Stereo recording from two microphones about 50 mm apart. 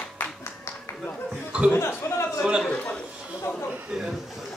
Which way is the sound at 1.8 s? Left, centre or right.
Left.